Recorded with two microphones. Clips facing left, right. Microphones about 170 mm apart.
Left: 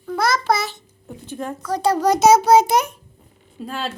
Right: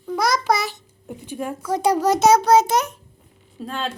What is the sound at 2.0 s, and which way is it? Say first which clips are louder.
A child's voice: left 3 dB; centre (ahead or behind).